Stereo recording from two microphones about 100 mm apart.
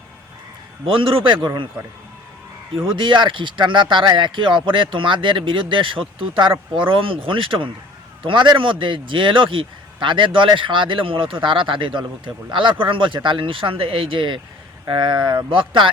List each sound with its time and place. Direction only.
0.9 s speech: 65° right (ahead or behind)
2.8 s speech: 55° right (ahead or behind)